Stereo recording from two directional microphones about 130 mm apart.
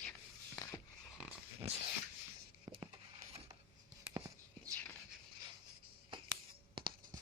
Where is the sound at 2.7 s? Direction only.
30° right (ahead or behind).